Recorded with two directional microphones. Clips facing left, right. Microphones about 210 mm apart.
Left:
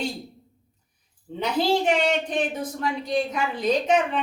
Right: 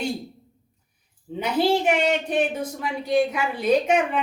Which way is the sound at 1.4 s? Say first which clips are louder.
Right 1 dB; 10° right (ahead or behind).